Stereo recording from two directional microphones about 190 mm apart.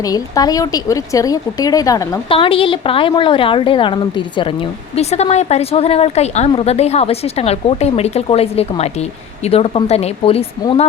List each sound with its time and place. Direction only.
0.0 s a woman's voice: 20° left (ahead or behind)